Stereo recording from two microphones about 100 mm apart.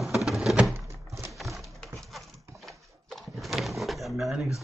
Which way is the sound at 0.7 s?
25° right (ahead or behind).